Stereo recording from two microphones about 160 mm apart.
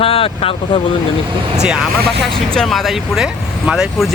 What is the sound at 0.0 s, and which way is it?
Speech, 35° left (ahead or behind).